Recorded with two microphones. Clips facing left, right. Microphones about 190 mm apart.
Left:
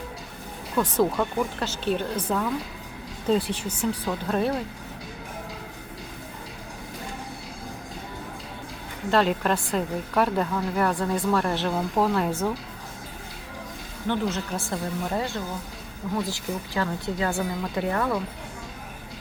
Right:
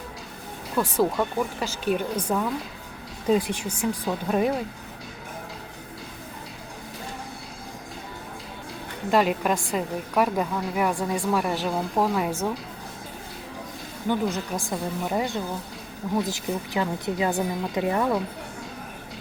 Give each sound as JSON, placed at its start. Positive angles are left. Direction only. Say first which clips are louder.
{"t": 0.8, "sound": "a woman's voice", "louder": "even", "side_deg": -10}
{"t": 9.0, "sound": "a woman's voice", "louder": "even", "side_deg": -10}
{"t": 14.1, "sound": "a woman's voice", "louder": "right 1 dB", "side_deg": -15}